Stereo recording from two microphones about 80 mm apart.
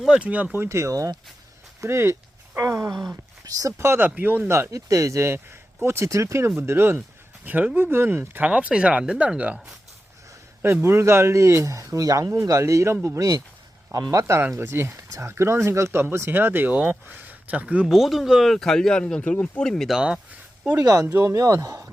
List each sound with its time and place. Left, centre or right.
0.1 s speech: centre
4.4 s speech: right
7.4 s speech: centre
10.6 s speech: right
14.4 s speech: right
17.8 s speech: centre
19.9 s speech: centre
20.7 s speech: right